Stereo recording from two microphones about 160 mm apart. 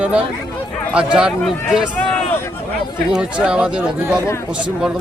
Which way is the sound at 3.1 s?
5° right (ahead or behind).